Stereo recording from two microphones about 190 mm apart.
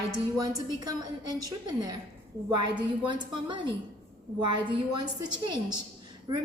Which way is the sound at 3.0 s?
25° right (ahead or behind).